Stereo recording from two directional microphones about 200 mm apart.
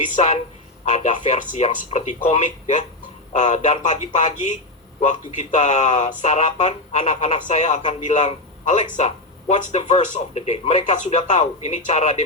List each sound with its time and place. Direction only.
0.0 s a man's voice: 35° left (ahead or behind)